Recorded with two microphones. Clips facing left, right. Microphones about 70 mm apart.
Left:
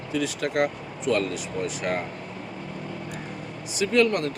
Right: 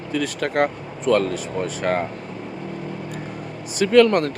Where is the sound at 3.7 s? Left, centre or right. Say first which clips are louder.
Right 7 dB; right.